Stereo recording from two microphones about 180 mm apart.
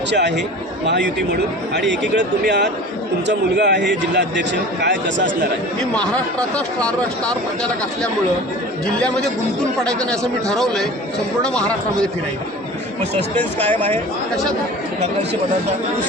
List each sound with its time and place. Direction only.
0.1 s a man's voice: 75° right (ahead or behind)
5.9 s speech: 5° left (ahead or behind)